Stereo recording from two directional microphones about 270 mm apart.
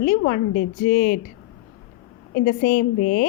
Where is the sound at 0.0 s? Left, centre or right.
Left.